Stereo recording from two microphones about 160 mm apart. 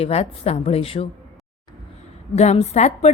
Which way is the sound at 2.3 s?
45° left (ahead or behind).